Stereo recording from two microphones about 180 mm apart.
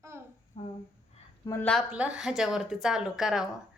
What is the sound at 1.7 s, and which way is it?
Speech, 5° right (ahead or behind).